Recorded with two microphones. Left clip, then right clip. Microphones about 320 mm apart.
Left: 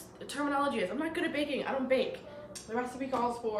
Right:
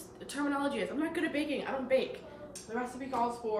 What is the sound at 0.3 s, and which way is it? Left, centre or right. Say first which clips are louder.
A woman's voice: left 2 dB; centre.